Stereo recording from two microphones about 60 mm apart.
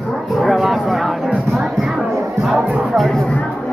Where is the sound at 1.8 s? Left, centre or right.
Centre.